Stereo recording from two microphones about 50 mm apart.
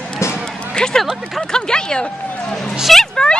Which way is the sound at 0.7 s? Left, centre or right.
Centre.